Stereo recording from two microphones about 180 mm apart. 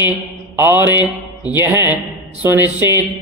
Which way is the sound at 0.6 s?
10° right (ahead or behind).